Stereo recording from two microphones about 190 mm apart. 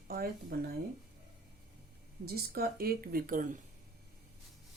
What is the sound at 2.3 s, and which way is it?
Speech, 55° right (ahead or behind).